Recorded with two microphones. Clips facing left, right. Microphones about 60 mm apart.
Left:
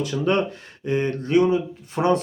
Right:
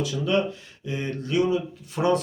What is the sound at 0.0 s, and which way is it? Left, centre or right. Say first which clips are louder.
Speech: left 2 dB; left.